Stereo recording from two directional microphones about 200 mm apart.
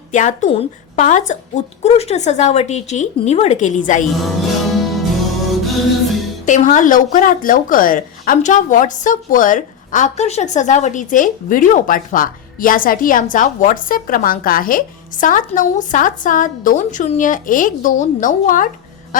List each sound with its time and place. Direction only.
0.1 s speech: 35° left (ahead or behind)
4.2 s music: centre (ahead or behind)
6.4 s speech: 40° left (ahead or behind)